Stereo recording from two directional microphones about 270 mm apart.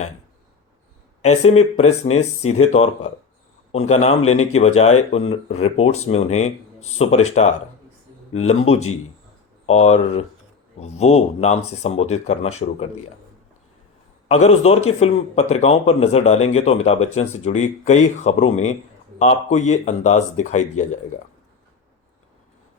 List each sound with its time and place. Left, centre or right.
1.2 s speech: left
2.4 s speech: left
2.7 s speech: left
4.2 s speech: left
5.1 s speech: left
14.3 s speech: left